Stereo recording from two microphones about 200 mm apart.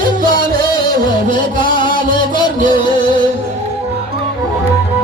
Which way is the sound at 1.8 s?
25° left (ahead or behind).